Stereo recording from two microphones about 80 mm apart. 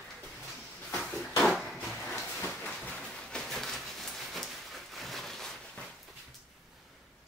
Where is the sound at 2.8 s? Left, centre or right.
Centre.